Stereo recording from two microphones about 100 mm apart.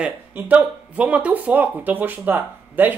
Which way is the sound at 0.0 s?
15° right (ahead or behind).